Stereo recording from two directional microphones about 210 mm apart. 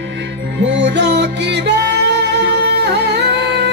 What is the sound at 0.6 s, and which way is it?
Music, 55° right (ahead or behind).